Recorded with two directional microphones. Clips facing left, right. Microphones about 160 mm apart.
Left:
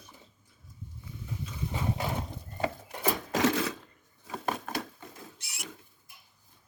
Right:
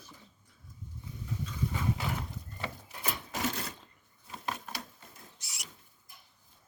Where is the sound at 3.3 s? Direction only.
90° left.